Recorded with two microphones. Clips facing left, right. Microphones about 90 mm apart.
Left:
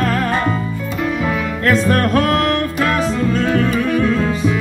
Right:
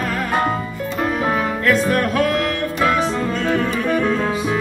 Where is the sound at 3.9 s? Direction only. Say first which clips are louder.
Left 2 dB; 40° right (ahead or behind).